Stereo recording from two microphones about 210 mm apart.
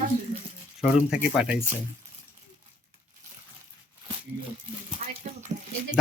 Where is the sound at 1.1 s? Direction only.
5° right (ahead or behind).